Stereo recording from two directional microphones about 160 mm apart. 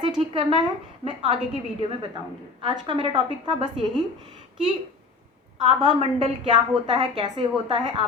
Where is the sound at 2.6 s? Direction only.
30° right (ahead or behind).